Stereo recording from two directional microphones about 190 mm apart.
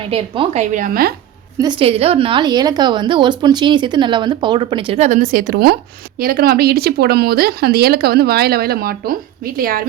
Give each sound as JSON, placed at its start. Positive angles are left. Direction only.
{"t": 0.1, "sound": "a woman's voice", "side_deg": -35}
{"t": 1.5, "sound": "a woman's voice", "side_deg": -25}